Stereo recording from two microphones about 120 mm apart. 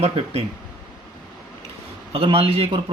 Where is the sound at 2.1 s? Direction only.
50° right (ahead or behind).